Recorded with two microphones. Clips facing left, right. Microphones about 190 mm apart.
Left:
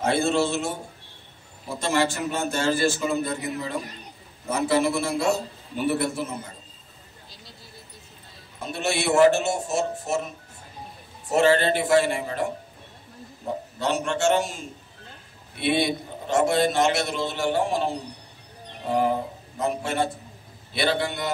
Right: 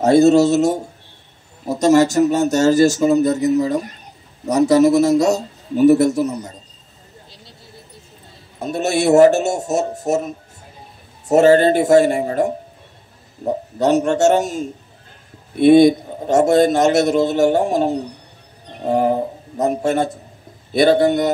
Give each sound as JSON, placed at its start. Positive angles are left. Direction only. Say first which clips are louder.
{"t": 0.0, "sound": "a man's voice", "louder": "right 11 dB", "side_deg": -40}
{"t": 8.5, "sound": "a man's voice", "louder": "right 8 dB", "side_deg": -40}